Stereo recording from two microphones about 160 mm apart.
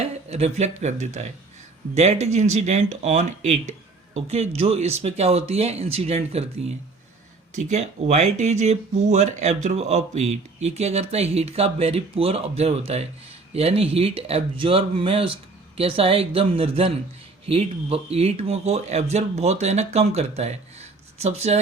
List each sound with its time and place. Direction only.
0.0 s speech: 40° right (ahead or behind)